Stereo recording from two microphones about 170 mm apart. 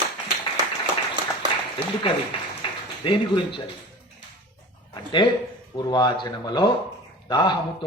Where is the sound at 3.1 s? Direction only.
30° left (ahead or behind).